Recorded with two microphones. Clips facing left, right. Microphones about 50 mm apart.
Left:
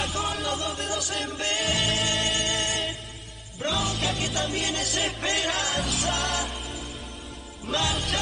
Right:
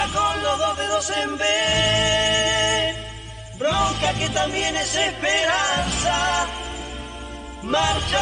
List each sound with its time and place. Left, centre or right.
0.0 s music: right
7.6 s music: right